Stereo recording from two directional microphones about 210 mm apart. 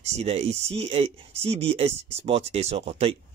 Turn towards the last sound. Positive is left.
turn(degrees=-30)  # may be behind; listen again after turning